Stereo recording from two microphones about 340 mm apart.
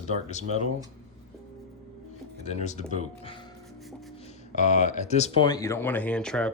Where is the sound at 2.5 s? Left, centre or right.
Centre.